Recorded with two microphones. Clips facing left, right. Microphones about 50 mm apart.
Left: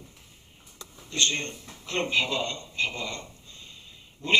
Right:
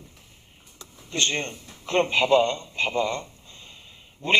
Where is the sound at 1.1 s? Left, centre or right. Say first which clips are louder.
Right 2 dB; right.